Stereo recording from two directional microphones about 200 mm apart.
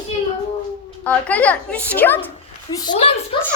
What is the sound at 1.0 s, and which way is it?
A woman's voice, 5° left (ahead or behind).